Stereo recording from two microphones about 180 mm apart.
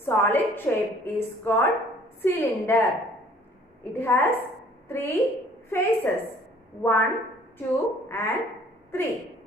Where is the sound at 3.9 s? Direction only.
10° left (ahead or behind).